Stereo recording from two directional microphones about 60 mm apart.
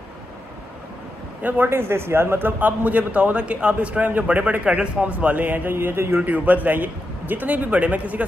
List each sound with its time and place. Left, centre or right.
1.4 s a man's voice: right
6.1 s a man's voice: right